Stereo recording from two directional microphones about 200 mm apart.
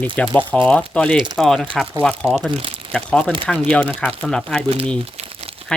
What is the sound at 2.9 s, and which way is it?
Speech, 5° left (ahead or behind).